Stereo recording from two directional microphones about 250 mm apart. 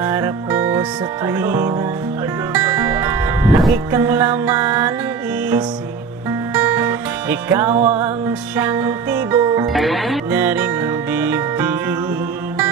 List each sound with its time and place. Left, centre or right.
0.0 s music: centre
6.5 s music: centre
7.7 s music: right
8.0 s music: centre
9.7 s music: centre